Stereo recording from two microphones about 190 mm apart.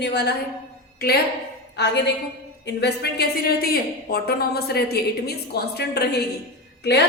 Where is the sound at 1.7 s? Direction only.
60° left (ahead or behind).